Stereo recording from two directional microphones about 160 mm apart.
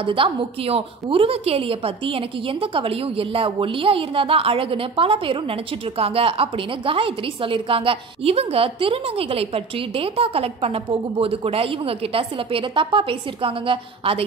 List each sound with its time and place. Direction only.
0.0 s a woman's voice: 35° right (ahead or behind)